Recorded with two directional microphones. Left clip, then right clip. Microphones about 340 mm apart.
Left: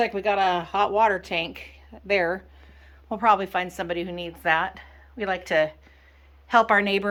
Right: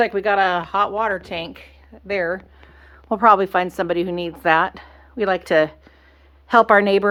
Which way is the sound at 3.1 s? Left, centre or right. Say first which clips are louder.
Right 7 dB; centre.